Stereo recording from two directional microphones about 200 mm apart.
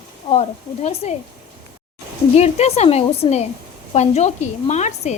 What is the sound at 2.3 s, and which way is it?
A woman's voice, 35° left (ahead or behind).